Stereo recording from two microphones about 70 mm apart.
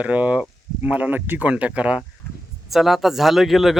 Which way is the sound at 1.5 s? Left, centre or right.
Centre.